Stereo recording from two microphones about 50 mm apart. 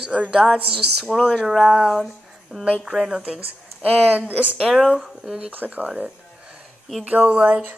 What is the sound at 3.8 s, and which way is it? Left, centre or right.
Speech, right.